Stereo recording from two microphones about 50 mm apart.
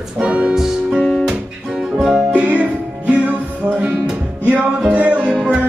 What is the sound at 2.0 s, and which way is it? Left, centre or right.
Music, centre.